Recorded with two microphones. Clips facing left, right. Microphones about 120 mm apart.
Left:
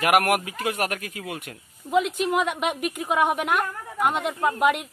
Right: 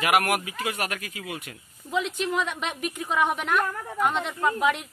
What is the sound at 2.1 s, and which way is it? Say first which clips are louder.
Speech: left 4 dB; 10° left (ahead or behind).